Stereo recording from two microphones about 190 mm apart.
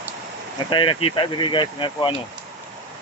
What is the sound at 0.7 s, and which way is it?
Speech, 25° left (ahead or behind).